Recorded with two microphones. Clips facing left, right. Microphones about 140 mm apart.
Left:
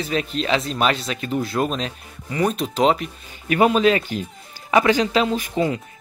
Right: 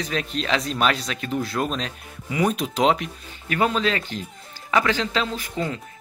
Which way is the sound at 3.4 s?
15° left (ahead or behind).